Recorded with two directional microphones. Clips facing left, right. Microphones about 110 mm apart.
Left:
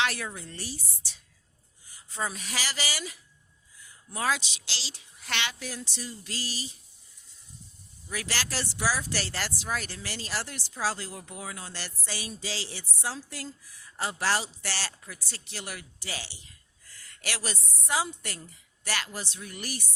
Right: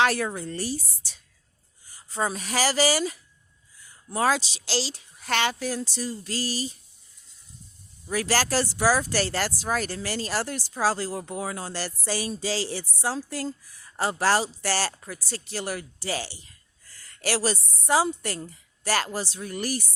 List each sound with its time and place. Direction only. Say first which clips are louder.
0.0 s a woman's voice: right 7 dB; 40° right (ahead or behind)
8.1 s a woman's voice: right 10 dB; 40° right (ahead or behind)